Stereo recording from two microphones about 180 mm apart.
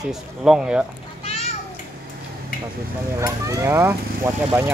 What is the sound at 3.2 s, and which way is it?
Speech, 15° right (ahead or behind).